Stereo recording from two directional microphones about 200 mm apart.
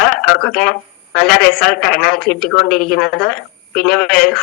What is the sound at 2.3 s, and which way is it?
Speech, 45° left (ahead or behind).